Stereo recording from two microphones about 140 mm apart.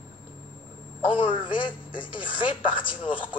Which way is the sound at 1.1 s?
35° left (ahead or behind).